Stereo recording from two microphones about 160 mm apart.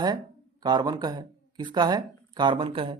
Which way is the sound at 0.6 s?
25° right (ahead or behind).